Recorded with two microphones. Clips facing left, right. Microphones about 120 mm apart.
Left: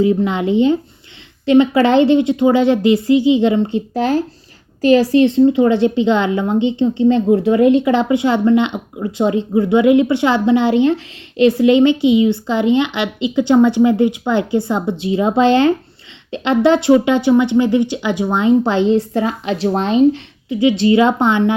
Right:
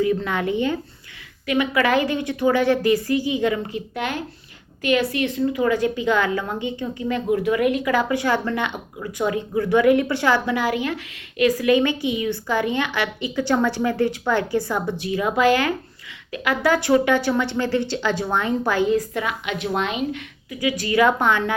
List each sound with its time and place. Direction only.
0.0 s a woman's voice: 20° left (ahead or behind)